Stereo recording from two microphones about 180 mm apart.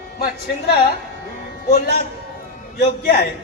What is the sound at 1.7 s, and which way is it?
A man's voice, 60° left (ahead or behind).